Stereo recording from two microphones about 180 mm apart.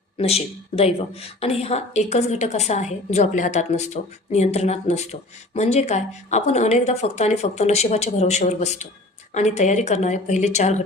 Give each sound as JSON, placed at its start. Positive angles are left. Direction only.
{"t": 0.2, "sound": "speech", "side_deg": 35}